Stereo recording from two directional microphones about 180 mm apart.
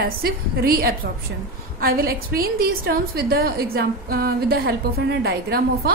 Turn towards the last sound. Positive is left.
turn(degrees=-60)  # may be behind; listen again after turning